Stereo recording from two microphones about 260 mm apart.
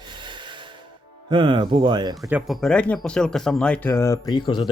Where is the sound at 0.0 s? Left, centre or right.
Centre.